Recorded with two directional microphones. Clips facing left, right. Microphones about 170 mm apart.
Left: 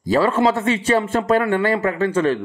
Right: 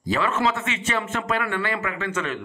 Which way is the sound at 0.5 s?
35° left (ahead or behind).